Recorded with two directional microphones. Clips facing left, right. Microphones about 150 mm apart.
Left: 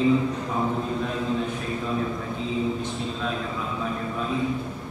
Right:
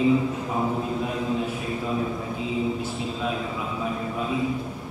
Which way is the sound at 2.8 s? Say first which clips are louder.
Right 1 dB; 10° right (ahead or behind).